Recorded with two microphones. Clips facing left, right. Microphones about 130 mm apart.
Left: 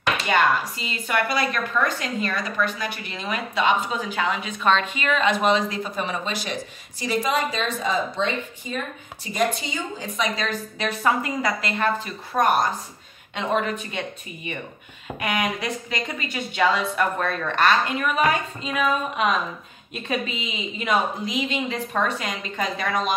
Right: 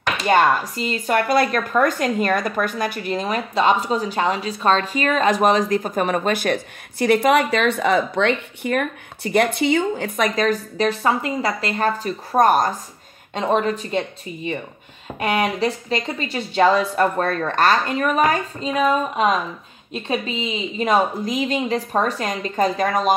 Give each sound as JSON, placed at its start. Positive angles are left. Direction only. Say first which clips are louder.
{"t": 0.3, "sound": "speech", "louder": "right 5 dB", "side_deg": -45}
{"t": 10.9, "sound": "speech", "louder": "even", "side_deg": -30}